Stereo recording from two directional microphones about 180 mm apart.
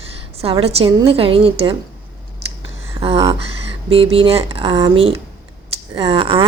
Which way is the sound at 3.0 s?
30° right (ahead or behind).